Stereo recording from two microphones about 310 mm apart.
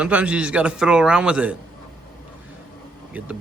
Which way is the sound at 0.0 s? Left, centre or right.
Centre.